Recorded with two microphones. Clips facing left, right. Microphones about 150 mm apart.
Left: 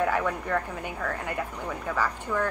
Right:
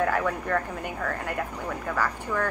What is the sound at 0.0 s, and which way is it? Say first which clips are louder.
Speech: right 1 dB; centre (ahead or behind).